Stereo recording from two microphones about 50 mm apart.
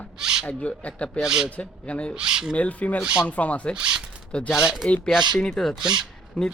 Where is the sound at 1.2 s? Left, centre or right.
Centre.